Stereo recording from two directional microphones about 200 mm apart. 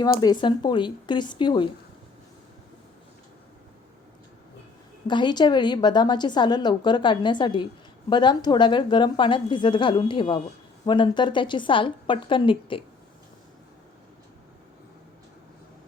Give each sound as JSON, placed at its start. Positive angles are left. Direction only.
{"t": 0.0, "sound": "a woman's voice", "side_deg": 20}
{"t": 5.0, "sound": "a woman's voice", "side_deg": 20}